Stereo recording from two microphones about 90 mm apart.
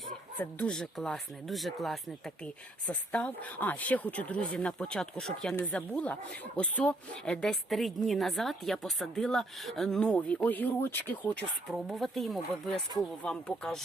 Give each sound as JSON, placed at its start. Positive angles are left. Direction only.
{"t": 0.3, "sound": "speech", "side_deg": 10}
{"t": 2.8, "sound": "speech", "side_deg": 15}
{"t": 11.7, "sound": "speech", "side_deg": 0}